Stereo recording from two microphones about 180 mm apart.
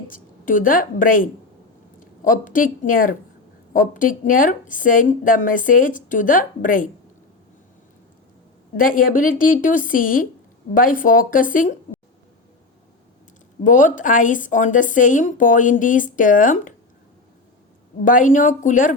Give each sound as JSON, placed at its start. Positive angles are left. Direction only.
{"t": 0.1, "sound": "a woman's voice", "side_deg": 50}
{"t": 8.7, "sound": "a woman's voice", "side_deg": 50}
{"t": 13.7, "sound": "a woman's voice", "side_deg": 45}
{"t": 18.0, "sound": "a woman's voice", "side_deg": 45}